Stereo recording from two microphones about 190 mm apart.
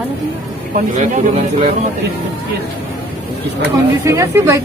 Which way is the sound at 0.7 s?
40° right (ahead or behind).